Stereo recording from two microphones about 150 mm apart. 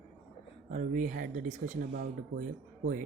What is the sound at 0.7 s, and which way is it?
Speech, 60° right (ahead or behind).